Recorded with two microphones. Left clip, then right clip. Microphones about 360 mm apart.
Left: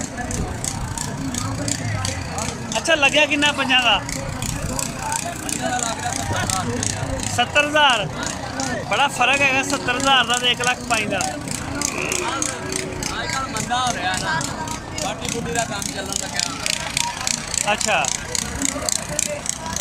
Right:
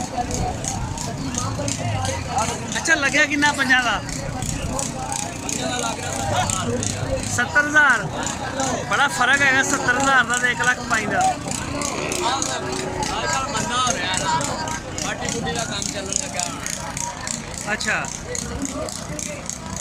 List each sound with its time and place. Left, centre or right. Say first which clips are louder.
2.8 s speech: left 2 dB; centre
7.3 s speech: even; centre
13.7 s speech: left 2 dB; centre
16.1 s vehicle: left 1 dB; left
17.7 s speech: left 3 dB; centre